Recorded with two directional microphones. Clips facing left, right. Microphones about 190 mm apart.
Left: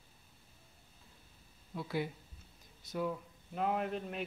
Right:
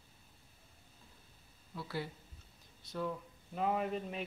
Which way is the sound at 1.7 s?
15° left (ahead or behind).